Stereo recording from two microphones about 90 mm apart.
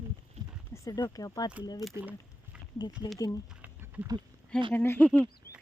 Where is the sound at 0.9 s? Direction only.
45° left (ahead or behind).